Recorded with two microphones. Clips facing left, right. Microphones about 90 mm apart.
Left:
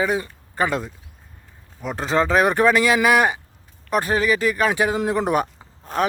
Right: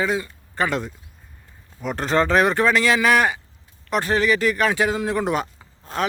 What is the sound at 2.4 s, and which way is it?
Speech, 15° left (ahead or behind).